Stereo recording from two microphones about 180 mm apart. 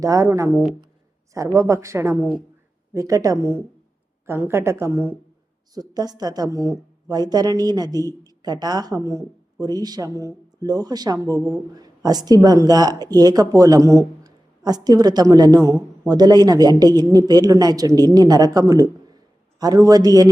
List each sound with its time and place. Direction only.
0.0 s speech: 20° right (ahead or behind)